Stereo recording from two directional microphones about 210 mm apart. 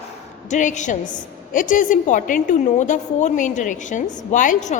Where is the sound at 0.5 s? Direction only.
35° left (ahead or behind).